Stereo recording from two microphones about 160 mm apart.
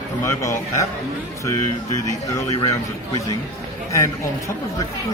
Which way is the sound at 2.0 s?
20° left (ahead or behind).